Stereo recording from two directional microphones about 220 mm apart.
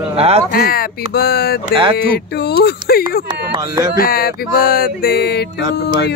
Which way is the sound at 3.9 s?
40° left (ahead or behind).